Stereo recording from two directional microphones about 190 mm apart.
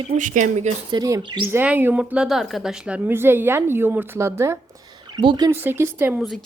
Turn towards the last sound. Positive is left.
turn(degrees=0)  # may be behind; listen again after turning